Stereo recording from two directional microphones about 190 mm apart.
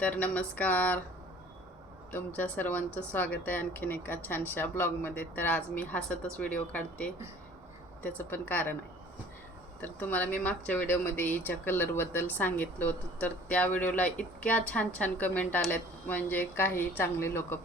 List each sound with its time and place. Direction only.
0.0 s a woman's voice: 5° left (ahead or behind)
2.1 s a woman's voice: 10° left (ahead or behind)
9.8 s a woman's voice: 10° left (ahead or behind)